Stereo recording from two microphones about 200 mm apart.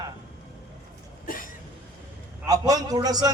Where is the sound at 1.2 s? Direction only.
45° left (ahead or behind).